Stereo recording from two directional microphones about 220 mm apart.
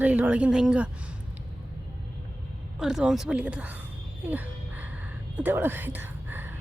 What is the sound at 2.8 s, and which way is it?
Speech, 5° right (ahead or behind).